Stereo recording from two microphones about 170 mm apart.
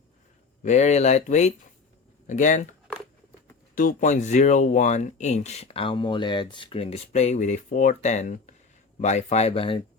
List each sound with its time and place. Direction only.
0.6 s speech: 45° left (ahead or behind)
3.8 s speech: 50° left (ahead or behind); by 9.8 s 30° left (ahead or behind)